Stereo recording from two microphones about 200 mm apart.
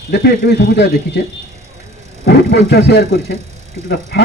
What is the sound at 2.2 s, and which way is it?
Speech, 55° left (ahead or behind).